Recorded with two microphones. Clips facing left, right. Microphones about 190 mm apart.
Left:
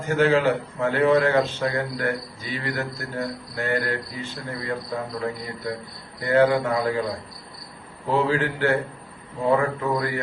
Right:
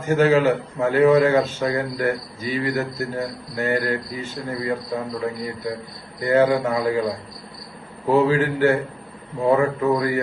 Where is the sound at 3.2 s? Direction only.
40° right (ahead or behind).